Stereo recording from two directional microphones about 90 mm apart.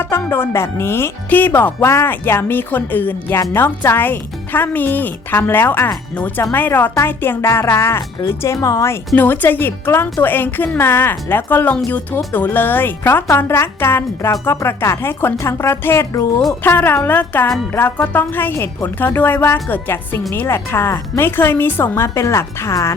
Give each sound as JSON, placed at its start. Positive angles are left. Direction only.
{"t": 0.0, "sound": "speech", "side_deg": 25}
{"t": 9.1, "sound": "speech", "side_deg": 20}